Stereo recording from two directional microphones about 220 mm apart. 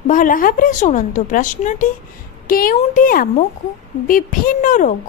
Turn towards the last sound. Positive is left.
turn(degrees=35)  # may be behind; listen again after turning